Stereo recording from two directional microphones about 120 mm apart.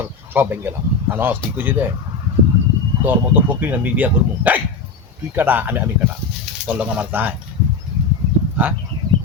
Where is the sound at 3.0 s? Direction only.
15° right (ahead or behind).